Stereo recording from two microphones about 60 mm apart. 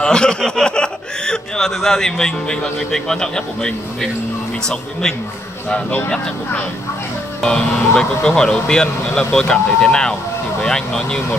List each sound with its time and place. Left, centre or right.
0.0 s snicker: centre
0.6 s speech: centre
5.7 s speech: centre